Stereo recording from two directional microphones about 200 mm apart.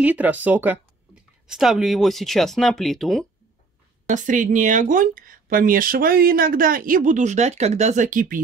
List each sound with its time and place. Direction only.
0.0 s speech: 10° right (ahead or behind)
4.1 s speech: 40° right (ahead or behind)